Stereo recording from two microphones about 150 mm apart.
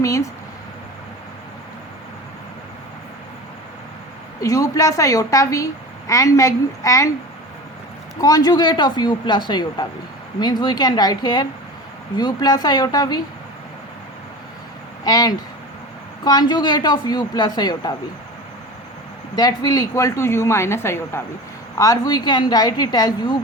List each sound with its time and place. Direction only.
0.0 s speech: 20° left (ahead or behind)
4.4 s a woman's voice: 20° left (ahead or behind)
8.2 s a woman's voice: 25° left (ahead or behind)
15.0 s a woman's voice: 25° left (ahead or behind)
19.4 s a woman's voice: 25° left (ahead or behind)